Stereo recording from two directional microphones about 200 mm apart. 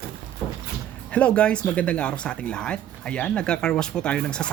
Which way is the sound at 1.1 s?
5° left (ahead or behind).